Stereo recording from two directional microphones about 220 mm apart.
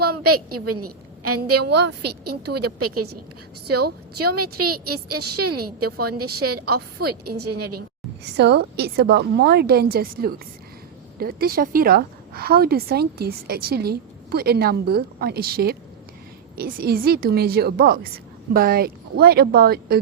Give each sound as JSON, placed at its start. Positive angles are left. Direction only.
{"t": 0.0, "sound": "a woman's voice", "side_deg": -90}
{"t": 4.2, "sound": "a woman's voice", "side_deg": -90}
{"t": 8.2, "sound": "a woman's voice", "side_deg": -50}